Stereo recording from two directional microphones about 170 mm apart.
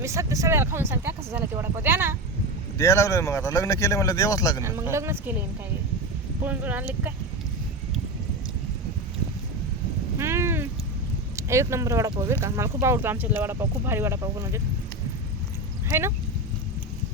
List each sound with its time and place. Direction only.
0.0 s speech: 20° right (ahead or behind)
2.7 s speech: 20° left (ahead or behind)
4.6 s speech: 15° right (ahead or behind)
6.4 s speech: 10° right (ahead or behind)
10.2 s cat: 15° right (ahead or behind)
11.3 s speech: 15° right (ahead or behind)
15.9 s speech: 15° right (ahead or behind)